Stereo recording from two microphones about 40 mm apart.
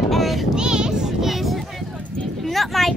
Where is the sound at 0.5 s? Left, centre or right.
Centre.